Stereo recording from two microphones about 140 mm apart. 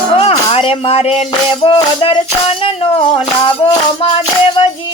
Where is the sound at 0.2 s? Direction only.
45° left (ahead or behind).